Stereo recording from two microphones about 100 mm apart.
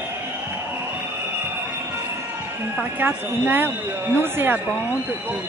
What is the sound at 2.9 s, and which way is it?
Speech, 20° right (ahead or behind).